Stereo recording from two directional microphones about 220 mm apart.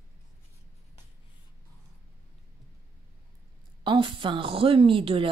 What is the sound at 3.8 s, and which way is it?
A woman's voice, 20° right (ahead or behind).